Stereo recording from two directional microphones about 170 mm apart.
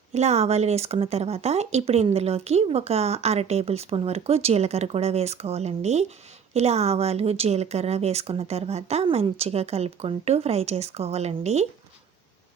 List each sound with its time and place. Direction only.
0.1 s speech: 40° right (ahead or behind)